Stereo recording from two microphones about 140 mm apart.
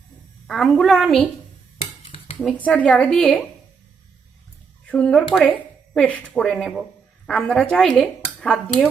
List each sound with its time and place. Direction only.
0.4 s speech: centre (ahead or behind)
2.0 s dishes: 40° left (ahead or behind)
2.6 s a woman's voice: 10° left (ahead or behind)
4.9 s speech: 10° left (ahead or behind)